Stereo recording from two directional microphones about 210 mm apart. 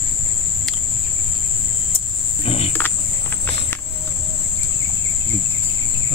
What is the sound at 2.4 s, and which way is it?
Cricket, 30° left (ahead or behind).